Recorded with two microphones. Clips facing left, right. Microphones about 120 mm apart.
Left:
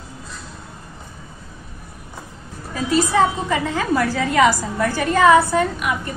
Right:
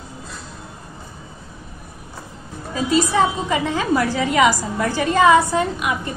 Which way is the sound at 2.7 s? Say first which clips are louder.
Even; 20° right (ahead or behind).